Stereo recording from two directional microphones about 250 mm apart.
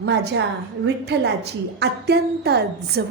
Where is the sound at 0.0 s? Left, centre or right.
Right.